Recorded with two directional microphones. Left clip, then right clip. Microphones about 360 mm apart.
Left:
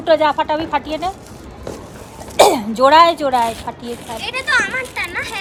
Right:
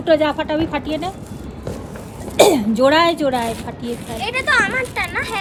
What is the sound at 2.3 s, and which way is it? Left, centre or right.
Speech, centre.